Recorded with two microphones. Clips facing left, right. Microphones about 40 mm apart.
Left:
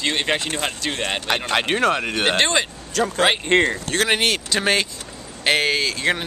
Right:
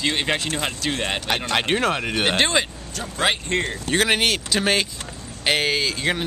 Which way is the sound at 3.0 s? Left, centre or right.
Left.